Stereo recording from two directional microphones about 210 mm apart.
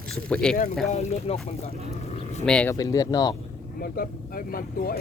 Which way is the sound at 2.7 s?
15° left (ahead or behind).